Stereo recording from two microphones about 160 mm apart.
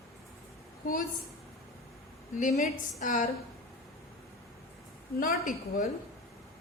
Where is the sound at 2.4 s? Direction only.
55° left (ahead or behind).